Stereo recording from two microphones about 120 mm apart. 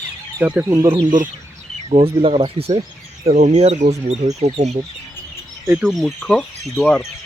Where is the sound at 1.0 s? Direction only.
90° right.